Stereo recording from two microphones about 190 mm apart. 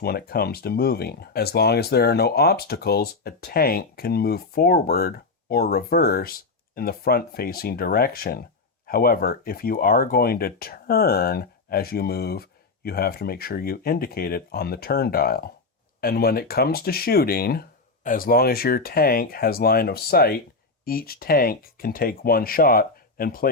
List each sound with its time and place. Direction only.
0.0 s speech: 55° left (ahead or behind)